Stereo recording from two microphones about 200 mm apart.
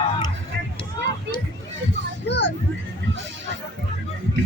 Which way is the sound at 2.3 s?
60° left (ahead or behind).